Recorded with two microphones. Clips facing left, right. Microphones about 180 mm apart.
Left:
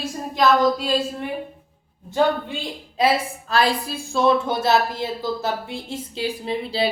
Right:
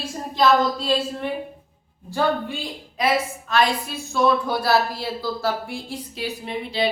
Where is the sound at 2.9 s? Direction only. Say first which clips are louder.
Left 2 dB; 30° left (ahead or behind).